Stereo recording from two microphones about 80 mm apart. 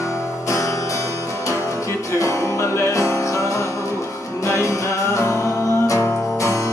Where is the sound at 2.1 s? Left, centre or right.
Left.